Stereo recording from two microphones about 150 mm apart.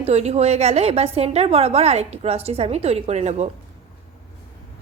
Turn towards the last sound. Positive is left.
turn(degrees=-45)  # may be behind; listen again after turning